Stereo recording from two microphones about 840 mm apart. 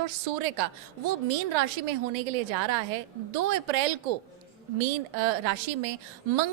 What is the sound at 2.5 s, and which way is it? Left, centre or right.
A woman's voice, right.